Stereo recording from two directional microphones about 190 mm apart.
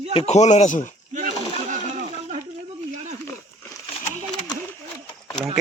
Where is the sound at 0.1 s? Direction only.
35° left (ahead or behind).